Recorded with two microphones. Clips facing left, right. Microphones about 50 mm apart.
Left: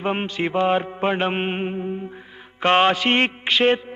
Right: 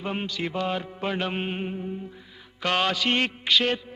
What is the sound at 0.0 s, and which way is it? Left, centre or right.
Mantra, left.